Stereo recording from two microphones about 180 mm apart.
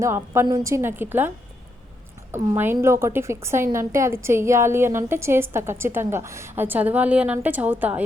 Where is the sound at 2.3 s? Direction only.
15° right (ahead or behind).